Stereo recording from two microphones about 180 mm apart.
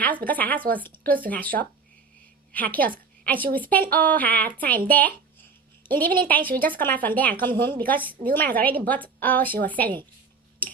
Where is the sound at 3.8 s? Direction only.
50° right (ahead or behind).